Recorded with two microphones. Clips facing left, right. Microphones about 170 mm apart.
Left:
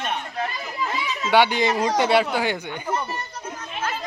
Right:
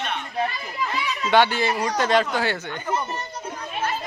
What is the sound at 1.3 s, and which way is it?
Speech, 15° left (ahead or behind).